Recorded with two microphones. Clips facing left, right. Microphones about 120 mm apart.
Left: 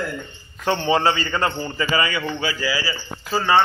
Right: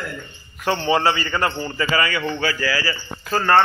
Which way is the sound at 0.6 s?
25° left (ahead or behind).